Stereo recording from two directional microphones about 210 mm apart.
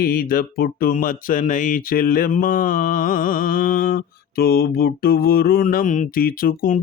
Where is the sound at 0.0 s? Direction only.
45° left (ahead or behind).